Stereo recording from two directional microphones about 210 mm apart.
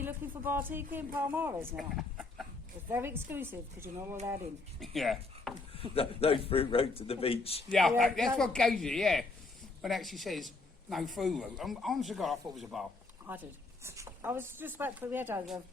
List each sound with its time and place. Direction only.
0.0 s speech: 10° right (ahead or behind)
2.9 s speech: 10° right (ahead or behind)
4.8 s speech: centre (ahead or behind)
5.9 s a man's voice: 25° left (ahead or behind)
7.7 s a man's voice: centre (ahead or behind)